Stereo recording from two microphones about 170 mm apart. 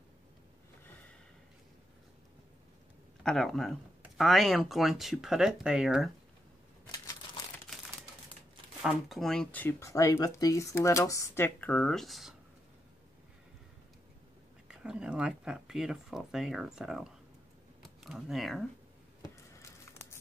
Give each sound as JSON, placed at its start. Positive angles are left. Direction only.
{"t": 3.3, "sound": "speech", "side_deg": 0}
{"t": 8.8, "sound": "speech", "side_deg": 0}
{"t": 14.7, "sound": "speech", "side_deg": -5}
{"t": 19.2, "sound": "a sound", "side_deg": 15}